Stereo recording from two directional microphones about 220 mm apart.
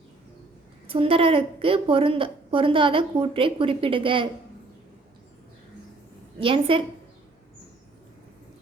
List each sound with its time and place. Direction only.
0.9 s a woman's voice: 25° right (ahead or behind)
6.4 s a woman's voice: 25° right (ahead or behind)